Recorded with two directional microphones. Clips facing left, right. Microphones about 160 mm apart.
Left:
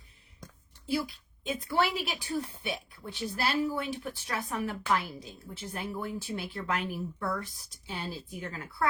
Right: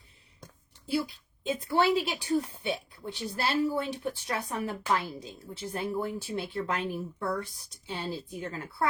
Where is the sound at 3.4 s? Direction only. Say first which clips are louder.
Right 2 dB; 30° right (ahead or behind).